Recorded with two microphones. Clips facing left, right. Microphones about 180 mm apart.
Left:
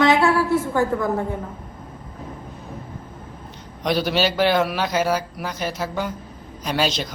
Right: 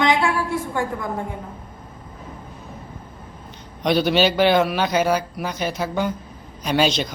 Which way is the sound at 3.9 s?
5° left (ahead or behind).